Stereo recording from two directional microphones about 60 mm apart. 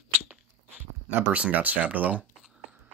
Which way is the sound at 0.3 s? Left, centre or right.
Right.